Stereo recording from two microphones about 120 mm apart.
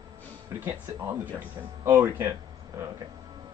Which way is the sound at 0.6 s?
20° right (ahead or behind).